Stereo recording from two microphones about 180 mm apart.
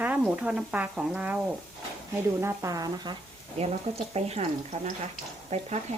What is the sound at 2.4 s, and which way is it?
Speech, 15° right (ahead or behind).